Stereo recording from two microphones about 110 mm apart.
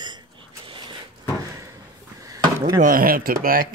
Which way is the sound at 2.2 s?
35° right (ahead or behind).